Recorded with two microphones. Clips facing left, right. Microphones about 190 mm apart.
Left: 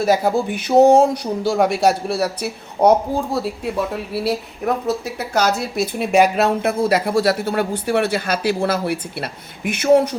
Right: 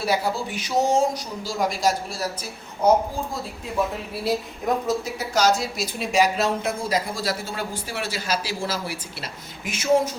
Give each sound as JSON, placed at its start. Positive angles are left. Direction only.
{"t": 0.0, "sound": "speech", "side_deg": 50}
{"t": 4.1, "sound": "speech", "side_deg": 70}